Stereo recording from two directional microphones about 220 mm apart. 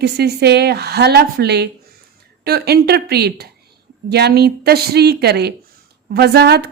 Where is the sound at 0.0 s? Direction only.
45° right (ahead or behind).